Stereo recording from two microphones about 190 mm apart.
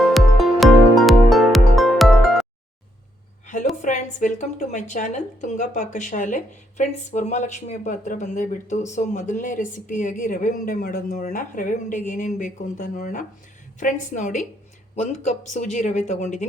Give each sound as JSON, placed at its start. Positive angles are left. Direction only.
{"t": 0.0, "sound": "music", "side_deg": 0}
{"t": 3.4, "sound": "a sound", "side_deg": 40}
{"t": 3.8, "sound": "a woman's voice", "side_deg": 40}